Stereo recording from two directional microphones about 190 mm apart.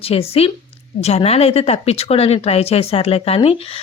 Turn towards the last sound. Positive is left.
turn(degrees=30)  # may be behind; listen again after turning